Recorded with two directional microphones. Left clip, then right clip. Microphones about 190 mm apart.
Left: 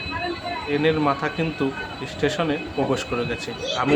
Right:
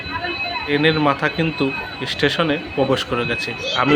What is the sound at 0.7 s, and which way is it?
Speech, 15° right (ahead or behind).